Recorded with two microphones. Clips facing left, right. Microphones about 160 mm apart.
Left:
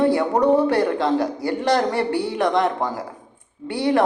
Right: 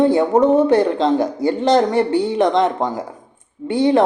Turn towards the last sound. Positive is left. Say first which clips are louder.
# right 5 dB
turn(degrees=-20)  # may be behind; listen again after turning